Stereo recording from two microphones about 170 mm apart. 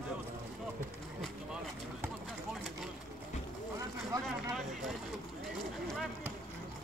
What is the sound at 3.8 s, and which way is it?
Vehicle, 20° right (ahead or behind).